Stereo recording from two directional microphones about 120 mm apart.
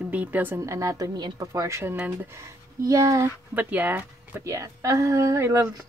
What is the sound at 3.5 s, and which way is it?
A woman's voice, 15° right (ahead or behind).